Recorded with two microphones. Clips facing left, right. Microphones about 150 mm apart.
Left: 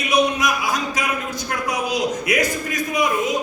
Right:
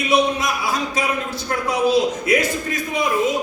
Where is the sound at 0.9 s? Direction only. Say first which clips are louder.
Right 2 dB; 30° right (ahead or behind).